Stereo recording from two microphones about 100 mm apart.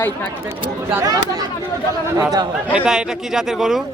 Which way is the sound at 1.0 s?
40° right (ahead or behind).